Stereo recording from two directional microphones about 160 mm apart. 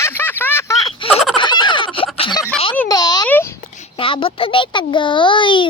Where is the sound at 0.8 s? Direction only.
35° left (ahead or behind).